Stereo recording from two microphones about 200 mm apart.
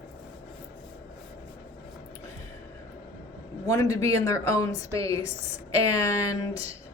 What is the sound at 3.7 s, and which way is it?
Speech, 15° left (ahead or behind).